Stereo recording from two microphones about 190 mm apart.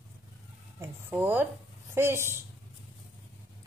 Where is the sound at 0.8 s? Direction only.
10° right (ahead or behind).